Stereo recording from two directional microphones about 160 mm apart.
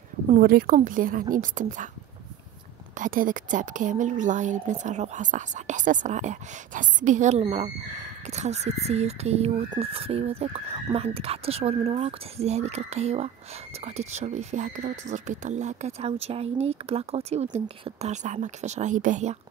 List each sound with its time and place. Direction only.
0.4 s a woman's voice: 65° right (ahead or behind)
3.0 s speech: 60° right (ahead or behind)